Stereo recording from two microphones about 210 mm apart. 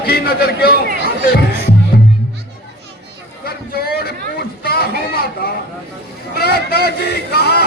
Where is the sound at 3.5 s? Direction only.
45° left (ahead or behind).